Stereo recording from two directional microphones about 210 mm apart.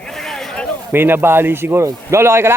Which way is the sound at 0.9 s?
10° right (ahead or behind).